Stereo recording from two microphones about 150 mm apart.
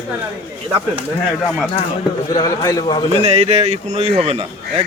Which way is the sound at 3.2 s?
45° right (ahead or behind).